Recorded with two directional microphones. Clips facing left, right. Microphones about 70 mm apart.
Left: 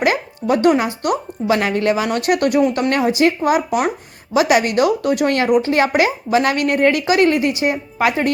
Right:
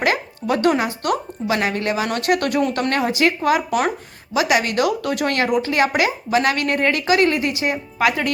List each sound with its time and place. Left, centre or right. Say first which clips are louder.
0.0 s speech: left 3 dB; left
2.9 s speech: left 3 dB; left